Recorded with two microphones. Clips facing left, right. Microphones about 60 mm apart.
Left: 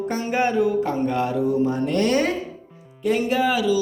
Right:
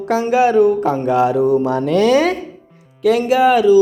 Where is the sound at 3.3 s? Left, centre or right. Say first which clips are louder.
Right 11 dB; right.